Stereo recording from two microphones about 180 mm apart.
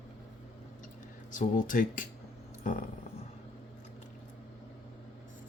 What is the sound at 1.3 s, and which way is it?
Speech, 45° left (ahead or behind).